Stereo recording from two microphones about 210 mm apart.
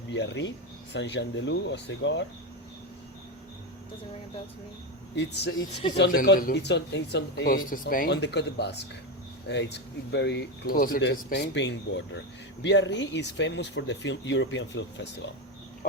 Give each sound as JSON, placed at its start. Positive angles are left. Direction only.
{"t": 0.1, "sound": "speech", "side_deg": 60}
{"t": 5.1, "sound": "speech", "side_deg": 55}
{"t": 11.0, "sound": "speech", "side_deg": 55}